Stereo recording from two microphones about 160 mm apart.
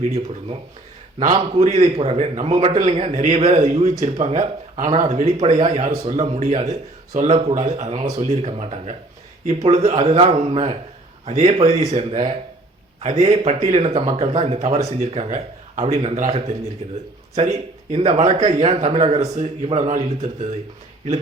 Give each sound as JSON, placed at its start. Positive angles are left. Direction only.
{"t": 1.3, "sound": "a man's voice", "side_deg": -40}